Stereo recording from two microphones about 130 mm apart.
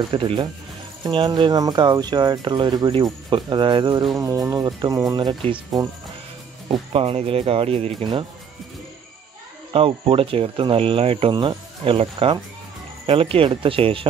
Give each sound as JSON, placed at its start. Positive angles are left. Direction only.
{"t": 0.1, "sound": "speech", "side_deg": -40}
{"t": 4.2, "sound": "speech", "side_deg": -25}
{"t": 6.7, "sound": "speech", "side_deg": -45}
{"t": 9.7, "sound": "speech", "side_deg": -40}